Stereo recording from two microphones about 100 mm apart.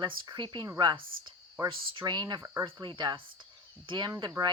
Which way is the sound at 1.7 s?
50° right (ahead or behind).